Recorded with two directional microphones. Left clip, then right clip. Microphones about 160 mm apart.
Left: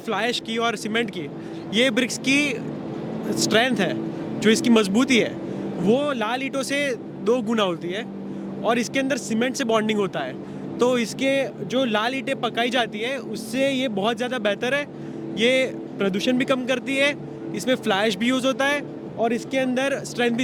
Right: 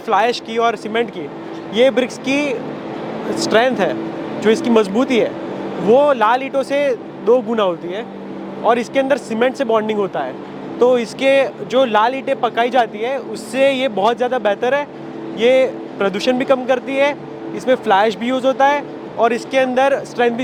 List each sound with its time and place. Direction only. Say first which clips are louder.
0.1 s speech: right 9 dB; 35° left (ahead or behind)
11.2 s speech: right 9 dB; 25° left (ahead or behind)
13.6 s speech: right 8 dB; 20° left (ahead or behind)
14.1 s speech: right 7 dB; 35° left (ahead or behind)